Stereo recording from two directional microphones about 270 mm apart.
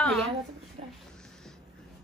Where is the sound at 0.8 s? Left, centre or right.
Right.